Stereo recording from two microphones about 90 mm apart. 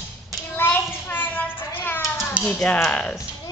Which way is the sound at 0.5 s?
20° left (ahead or behind).